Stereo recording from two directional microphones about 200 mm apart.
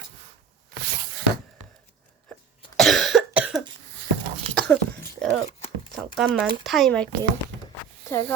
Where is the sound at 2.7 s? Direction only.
Centre (ahead or behind).